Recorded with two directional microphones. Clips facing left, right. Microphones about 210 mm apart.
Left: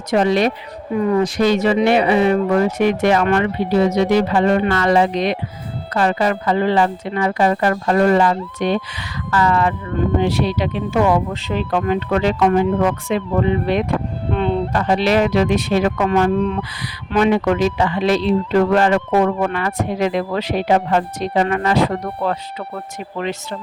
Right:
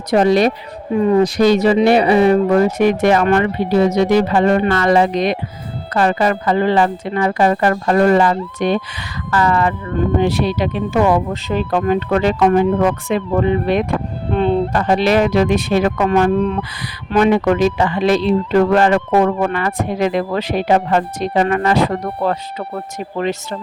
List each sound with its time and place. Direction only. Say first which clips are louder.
0.1 s a woman's voice: right 3 dB; 35° right (ahead or behind)
0.9 s speech: right 3 dB; 25° right (ahead or behind)